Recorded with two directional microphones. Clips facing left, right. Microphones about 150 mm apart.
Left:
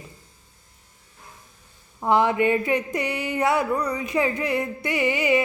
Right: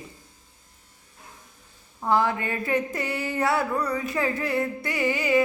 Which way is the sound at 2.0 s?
20° left (ahead or behind).